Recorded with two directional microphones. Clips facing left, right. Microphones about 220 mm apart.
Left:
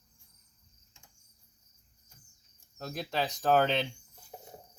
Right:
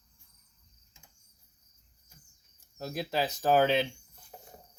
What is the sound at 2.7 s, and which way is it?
Speech, 10° right (ahead or behind).